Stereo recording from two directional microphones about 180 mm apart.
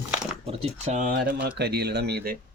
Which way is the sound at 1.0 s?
60° right (ahead or behind).